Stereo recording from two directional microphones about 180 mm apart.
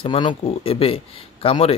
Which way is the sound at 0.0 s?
25° left (ahead or behind).